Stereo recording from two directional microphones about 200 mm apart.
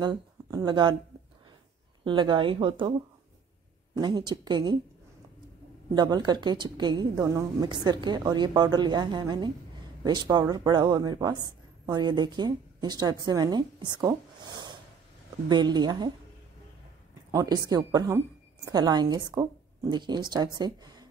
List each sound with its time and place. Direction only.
0.0 s speech: 20° right (ahead or behind)
2.0 s a woman's voice: 25° right (ahead or behind)
3.9 s a woman's voice: 20° right (ahead or behind)
5.9 s a woman's voice: 20° right (ahead or behind)
17.3 s a woman's voice: 15° right (ahead or behind)